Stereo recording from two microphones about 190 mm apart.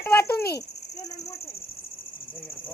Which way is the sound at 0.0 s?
10° left (ahead or behind).